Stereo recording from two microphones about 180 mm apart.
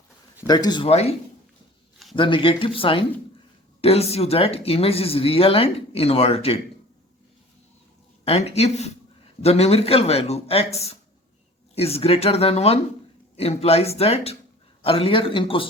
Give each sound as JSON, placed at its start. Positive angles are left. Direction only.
{"t": 0.4, "sound": "speech", "side_deg": 20}
{"t": 2.1, "sound": "speech", "side_deg": 30}
{"t": 8.2, "sound": "speech", "side_deg": 35}